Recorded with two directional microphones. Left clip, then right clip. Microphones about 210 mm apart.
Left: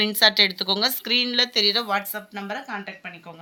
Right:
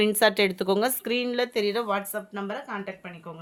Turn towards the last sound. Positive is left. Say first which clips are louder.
# left 1 dB
turn(degrees=-55)  # may be behind; listen again after turning